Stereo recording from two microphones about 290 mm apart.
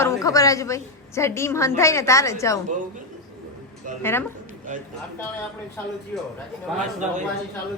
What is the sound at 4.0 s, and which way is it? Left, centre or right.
Speech, centre.